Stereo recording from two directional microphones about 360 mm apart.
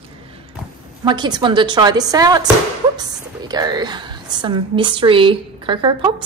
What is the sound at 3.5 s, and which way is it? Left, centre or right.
A woman's voice, centre.